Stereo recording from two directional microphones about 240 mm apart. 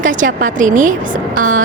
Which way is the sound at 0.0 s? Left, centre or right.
Right.